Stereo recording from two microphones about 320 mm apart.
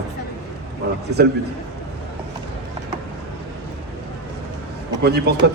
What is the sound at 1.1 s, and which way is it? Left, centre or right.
Speech, right.